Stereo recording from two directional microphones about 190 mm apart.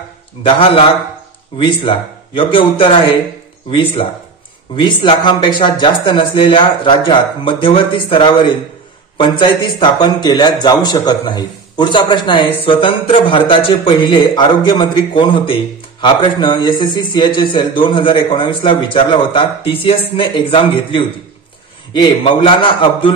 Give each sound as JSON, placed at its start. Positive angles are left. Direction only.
{"t": 0.4, "sound": "a man's voice", "side_deg": 30}